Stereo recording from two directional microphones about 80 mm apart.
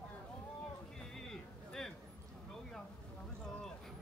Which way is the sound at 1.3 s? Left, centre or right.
Centre.